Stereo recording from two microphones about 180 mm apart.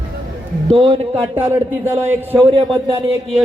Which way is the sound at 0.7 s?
30° right (ahead or behind).